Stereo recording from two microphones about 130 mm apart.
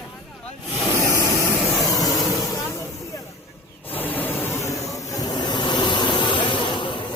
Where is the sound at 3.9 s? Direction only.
15° left (ahead or behind); by 7.0 s 40° left (ahead or behind).